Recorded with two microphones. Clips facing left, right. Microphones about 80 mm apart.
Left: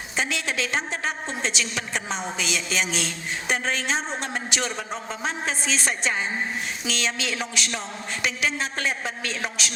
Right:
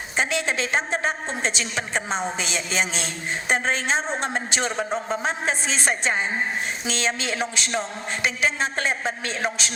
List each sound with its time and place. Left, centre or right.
0.2 s a woman's voice: right